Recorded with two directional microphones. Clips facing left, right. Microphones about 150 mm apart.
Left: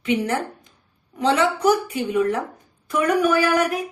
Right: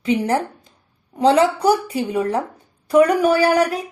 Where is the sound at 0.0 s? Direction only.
35° right (ahead or behind).